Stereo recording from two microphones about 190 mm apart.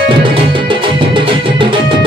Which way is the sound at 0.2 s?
25° right (ahead or behind).